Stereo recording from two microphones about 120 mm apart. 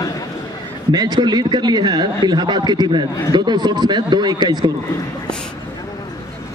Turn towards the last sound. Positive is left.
turn(degrees=-35)  # may be behind; listen again after turning